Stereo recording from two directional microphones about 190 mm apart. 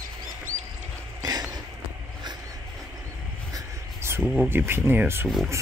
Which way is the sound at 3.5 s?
15° right (ahead or behind).